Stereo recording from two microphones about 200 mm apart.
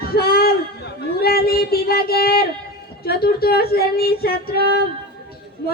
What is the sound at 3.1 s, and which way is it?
Speech, 50° left (ahead or behind).